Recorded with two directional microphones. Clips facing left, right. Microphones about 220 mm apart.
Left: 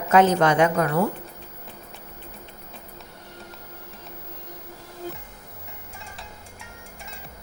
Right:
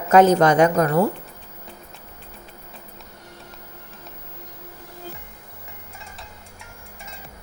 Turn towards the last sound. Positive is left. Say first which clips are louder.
# left 1 dB
turn(degrees=0)  # may be behind; listen again after turning